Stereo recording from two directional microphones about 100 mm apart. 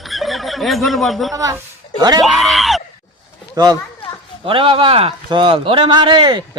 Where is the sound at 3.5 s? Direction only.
40° right (ahead or behind).